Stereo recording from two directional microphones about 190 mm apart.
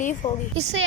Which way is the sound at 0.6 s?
65° right (ahead or behind).